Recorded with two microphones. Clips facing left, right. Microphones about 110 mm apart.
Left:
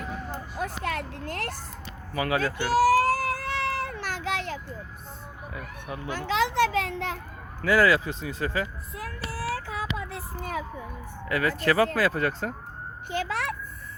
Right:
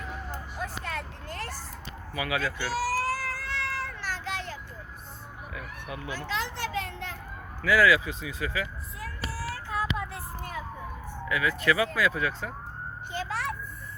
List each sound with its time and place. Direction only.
0.6 s a sound: 65° left (ahead or behind)
2.1 s speech: 35° left (ahead or behind)
2.7 s baby cry: 55° left (ahead or behind); by 4.6 s 70° left (ahead or behind)
6.1 s children playing: 70° left (ahead or behind); by 7.2 s 90° left
7.6 s speech: 30° left (ahead or behind)
9.0 s child singing: 65° left (ahead or behind); by 10.2 s 90° left
11.3 s speech: 40° left (ahead or behind)
13.1 s a sound: 70° left (ahead or behind)